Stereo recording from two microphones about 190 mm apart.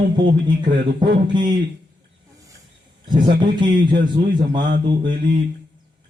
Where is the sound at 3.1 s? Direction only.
25° right (ahead or behind).